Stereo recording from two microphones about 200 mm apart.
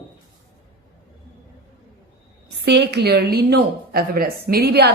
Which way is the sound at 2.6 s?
60° right (ahead or behind).